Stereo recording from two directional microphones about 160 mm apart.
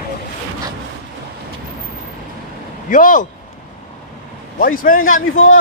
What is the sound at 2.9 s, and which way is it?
Speech, 55° left (ahead or behind).